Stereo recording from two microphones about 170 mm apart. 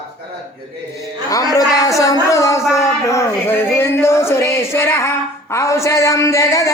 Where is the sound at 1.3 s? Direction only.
20° left (ahead or behind).